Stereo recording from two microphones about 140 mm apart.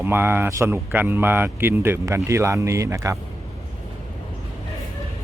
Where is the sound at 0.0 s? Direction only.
15° right (ahead or behind).